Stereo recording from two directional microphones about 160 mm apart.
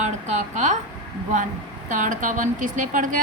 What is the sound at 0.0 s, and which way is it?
Speech, 50° right (ahead or behind).